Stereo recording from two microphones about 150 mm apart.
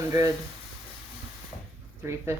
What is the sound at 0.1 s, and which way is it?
Speech, 25° right (ahead or behind).